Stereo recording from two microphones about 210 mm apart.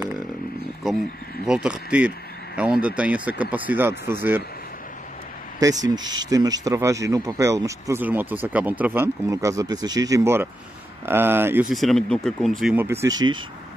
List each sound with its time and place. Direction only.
1.4 s speech: 5° right (ahead or behind)
5.6 s speech: 15° right (ahead or behind); by 12.8 s centre (ahead or behind)
12.8 s speech: 10° right (ahead or behind)